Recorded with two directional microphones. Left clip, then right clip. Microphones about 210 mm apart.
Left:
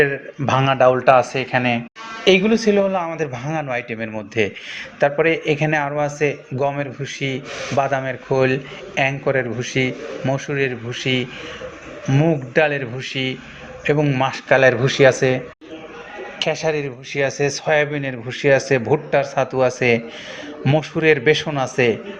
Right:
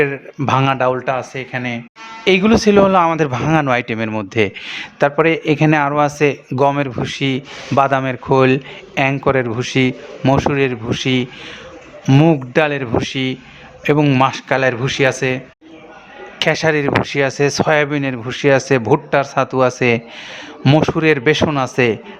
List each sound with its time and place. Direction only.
0.0 s a man's voice: 30° right (ahead or behind)
1.0 s speech: 5° right (ahead or behind)
2.4 s a man's voice: 35° right (ahead or behind)
14.6 s speech: 20° right (ahead or behind)
16.4 s a man's voice: 40° right (ahead or behind)